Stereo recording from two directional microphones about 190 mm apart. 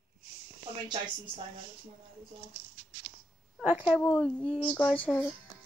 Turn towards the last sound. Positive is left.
turn(degrees=5)  # may be behind; listen again after turning